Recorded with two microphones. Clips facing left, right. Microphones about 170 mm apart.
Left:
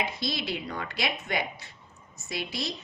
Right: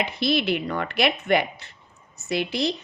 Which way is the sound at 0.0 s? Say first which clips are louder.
Right 8 dB; 65° right (ahead or behind).